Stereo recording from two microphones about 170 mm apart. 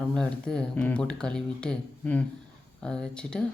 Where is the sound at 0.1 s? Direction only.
5° left (ahead or behind).